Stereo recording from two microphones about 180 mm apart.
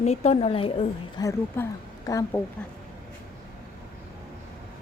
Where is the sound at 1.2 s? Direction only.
20° left (ahead or behind).